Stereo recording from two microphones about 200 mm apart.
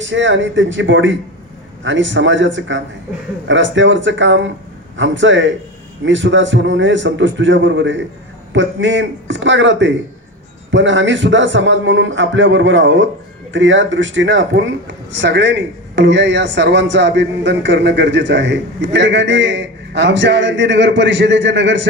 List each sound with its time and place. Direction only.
0.0 s a man's voice: 65° right (ahead or behind)